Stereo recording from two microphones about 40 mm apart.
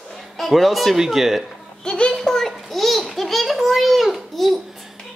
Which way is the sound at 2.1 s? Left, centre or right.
Centre.